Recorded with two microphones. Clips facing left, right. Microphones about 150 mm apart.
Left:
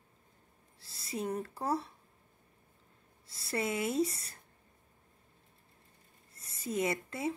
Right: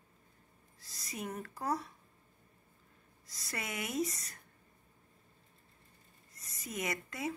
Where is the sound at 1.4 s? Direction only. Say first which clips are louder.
Left 3 dB; 30° left (ahead or behind).